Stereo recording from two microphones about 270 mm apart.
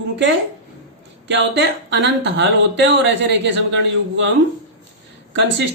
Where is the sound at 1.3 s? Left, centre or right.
Right.